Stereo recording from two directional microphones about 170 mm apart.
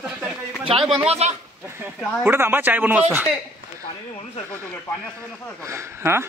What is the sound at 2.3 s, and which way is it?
Speech, 15° right (ahead or behind).